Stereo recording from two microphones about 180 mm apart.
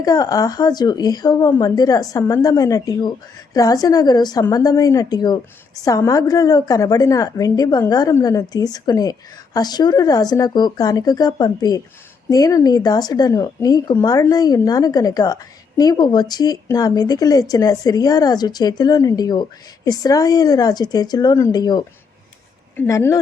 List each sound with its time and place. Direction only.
0.0 s speech: 20° left (ahead or behind)